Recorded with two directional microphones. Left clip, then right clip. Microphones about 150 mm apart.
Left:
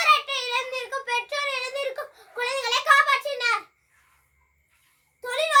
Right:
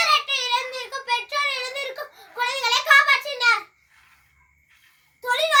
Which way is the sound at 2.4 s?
15° left (ahead or behind).